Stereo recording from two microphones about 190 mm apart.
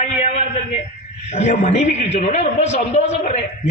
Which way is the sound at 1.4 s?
35° left (ahead or behind).